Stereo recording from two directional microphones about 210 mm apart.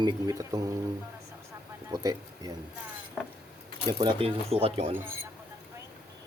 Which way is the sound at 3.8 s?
20° right (ahead or behind).